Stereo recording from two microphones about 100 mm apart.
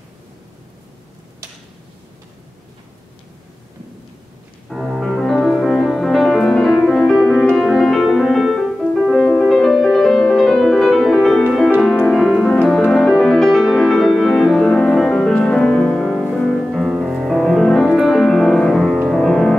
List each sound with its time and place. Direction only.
4.6 s music: 5° right (ahead or behind)